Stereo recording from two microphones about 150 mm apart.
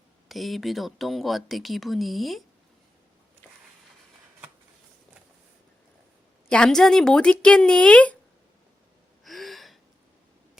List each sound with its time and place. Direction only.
0.3 s speech: centre (ahead or behind)
6.5 s speech: 5° left (ahead or behind)
9.2 s gasp: centre (ahead or behind)